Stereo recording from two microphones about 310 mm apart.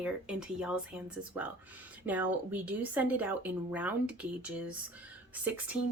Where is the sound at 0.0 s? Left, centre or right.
Centre.